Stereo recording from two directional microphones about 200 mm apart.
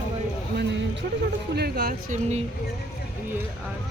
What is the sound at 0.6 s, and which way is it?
Speech, 60° right (ahead or behind).